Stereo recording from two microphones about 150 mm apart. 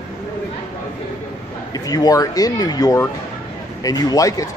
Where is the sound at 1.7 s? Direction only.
25° left (ahead or behind).